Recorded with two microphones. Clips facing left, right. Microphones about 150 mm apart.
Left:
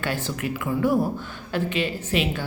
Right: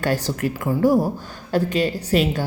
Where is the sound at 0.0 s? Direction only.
40° right (ahead or behind).